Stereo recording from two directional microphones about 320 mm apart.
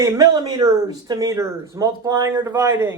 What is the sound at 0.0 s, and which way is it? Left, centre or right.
Speech, centre.